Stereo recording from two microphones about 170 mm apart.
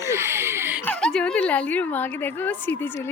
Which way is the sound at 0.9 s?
5° left (ahead or behind).